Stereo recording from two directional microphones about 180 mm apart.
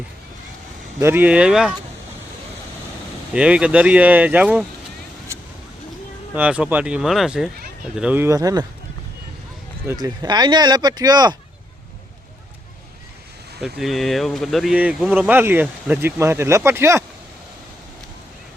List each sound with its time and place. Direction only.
0.9 s speech: 10° right (ahead or behind)
3.3 s speech: 5° right (ahead or behind)
6.3 s speech: 5° right (ahead or behind)
9.8 s speech: 20° right (ahead or behind)
13.6 s speech: centre (ahead or behind)